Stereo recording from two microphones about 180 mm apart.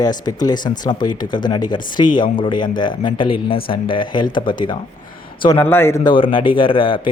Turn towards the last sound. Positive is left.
turn(degrees=30)  # may be behind; listen again after turning